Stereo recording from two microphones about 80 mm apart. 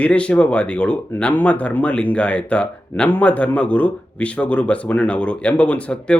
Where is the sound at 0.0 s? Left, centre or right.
Centre.